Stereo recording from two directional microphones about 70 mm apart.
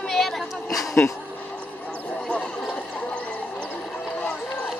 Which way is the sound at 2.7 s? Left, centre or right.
Centre.